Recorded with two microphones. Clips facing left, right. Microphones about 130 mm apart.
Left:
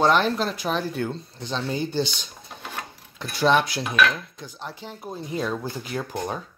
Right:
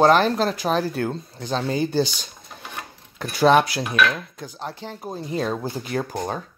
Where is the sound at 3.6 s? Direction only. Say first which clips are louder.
Right 1 dB; 5° right (ahead or behind).